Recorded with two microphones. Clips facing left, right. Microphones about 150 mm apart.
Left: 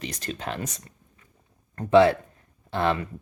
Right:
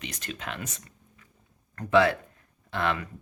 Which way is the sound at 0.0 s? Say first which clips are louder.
Left 5 dB; 35° left (ahead or behind).